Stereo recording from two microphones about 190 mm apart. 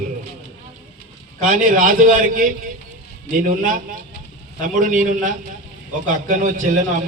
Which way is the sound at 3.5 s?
45° right (ahead or behind).